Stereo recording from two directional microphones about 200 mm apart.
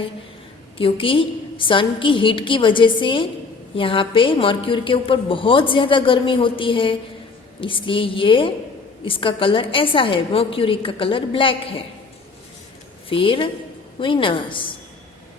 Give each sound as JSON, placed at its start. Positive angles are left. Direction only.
{"t": 0.8, "sound": "a woman's voice", "side_deg": 25}
{"t": 13.1, "sound": "a woman's voice", "side_deg": 25}